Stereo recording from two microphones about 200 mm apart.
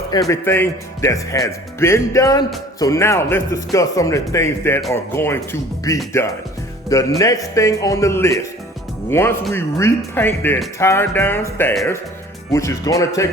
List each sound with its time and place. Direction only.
0.3 s speech: 10° left (ahead or behind)
7.2 s speech: 15° left (ahead or behind)